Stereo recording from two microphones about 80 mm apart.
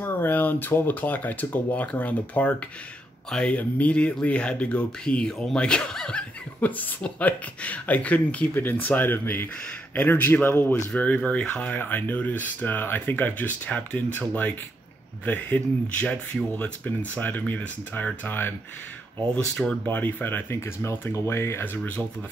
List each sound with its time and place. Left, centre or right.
0.0 s speech: left
19.5 s speech: centre
19.9 s speech: left
21.7 s speech: centre